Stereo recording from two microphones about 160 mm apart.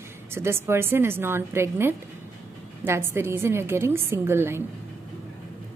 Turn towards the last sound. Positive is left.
turn(degrees=-15)  # may be behind; listen again after turning